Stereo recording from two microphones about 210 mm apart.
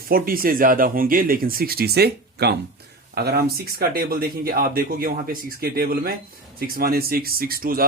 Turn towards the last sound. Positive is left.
turn(degrees=-45)  # may be behind; listen again after turning